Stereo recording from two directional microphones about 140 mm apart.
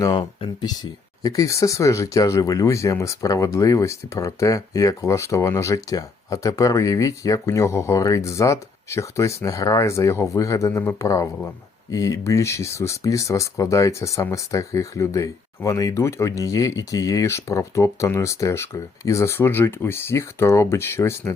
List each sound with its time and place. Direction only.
0.0 s speech: 30° left (ahead or behind)